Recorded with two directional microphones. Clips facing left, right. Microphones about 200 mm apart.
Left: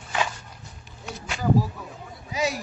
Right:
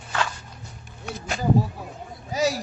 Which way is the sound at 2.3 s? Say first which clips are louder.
Right 3 dB; 40° right (ahead or behind).